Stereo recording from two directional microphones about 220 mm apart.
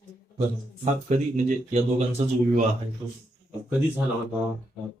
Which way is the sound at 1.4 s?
30° right (ahead or behind).